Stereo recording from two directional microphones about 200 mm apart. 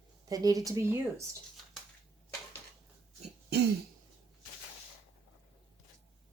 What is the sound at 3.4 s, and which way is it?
Throat clearing, 55° right (ahead or behind).